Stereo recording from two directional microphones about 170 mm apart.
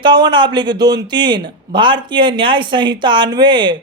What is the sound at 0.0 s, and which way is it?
A man's voice, 25° right (ahead or behind).